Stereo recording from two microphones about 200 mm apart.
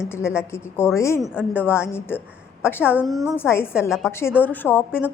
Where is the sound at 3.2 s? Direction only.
10° left (ahead or behind).